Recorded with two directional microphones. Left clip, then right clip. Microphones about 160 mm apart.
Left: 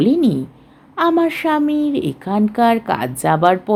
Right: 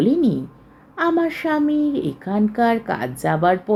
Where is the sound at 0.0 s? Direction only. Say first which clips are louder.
Left 3 dB; 50° left (ahead or behind).